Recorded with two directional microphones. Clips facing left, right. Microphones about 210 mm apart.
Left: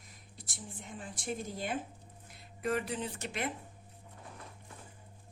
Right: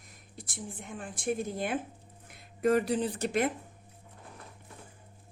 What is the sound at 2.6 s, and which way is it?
Speech, 40° right (ahead or behind).